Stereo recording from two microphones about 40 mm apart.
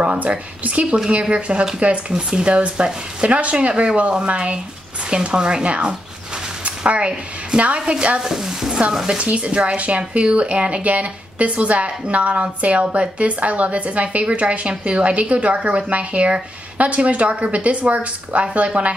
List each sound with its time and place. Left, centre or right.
0.0 s speech: right
8.2 s speech: centre
9.2 s speech: right